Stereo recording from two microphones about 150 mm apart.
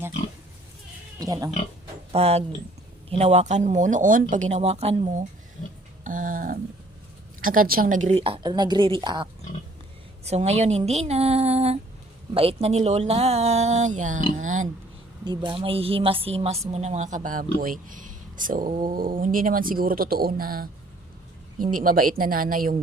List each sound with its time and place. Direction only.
1.2 s speech: 25° right (ahead or behind)
2.1 s speech: 45° right (ahead or behind)
6.1 s a sound: 65° right (ahead or behind)
7.4 s speech: 70° right (ahead or behind)
8.1 s a woman's voice: 35° right (ahead or behind)
10.2 s speech: 45° right (ahead or behind)
14.3 s a sound: 55° right (ahead or behind)
15.2 s a woman's voice: 30° right (ahead or behind); by 20.7 s 75° right (ahead or behind)
21.6 s speech: 65° right (ahead or behind)